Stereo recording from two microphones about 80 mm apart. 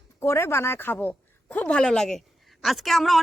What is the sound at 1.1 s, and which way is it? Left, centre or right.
A woman's voice, centre.